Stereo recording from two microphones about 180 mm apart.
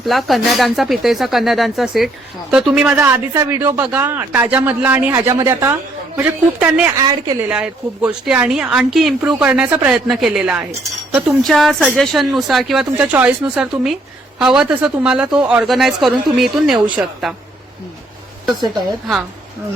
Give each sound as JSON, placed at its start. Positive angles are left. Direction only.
{"t": 0.0, "sound": "a woman's voice", "side_deg": 0}
{"t": 7.0, "sound": "a woman's voice", "side_deg": -20}
{"t": 7.4, "sound": "a woman's voice", "side_deg": -5}